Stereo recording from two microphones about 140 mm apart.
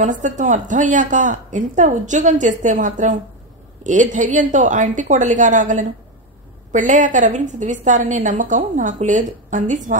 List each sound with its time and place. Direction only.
0.0 s a woman's voice: 60° right (ahead or behind)